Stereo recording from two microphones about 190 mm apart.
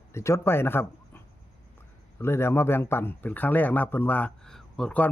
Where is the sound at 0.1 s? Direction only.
15° left (ahead or behind).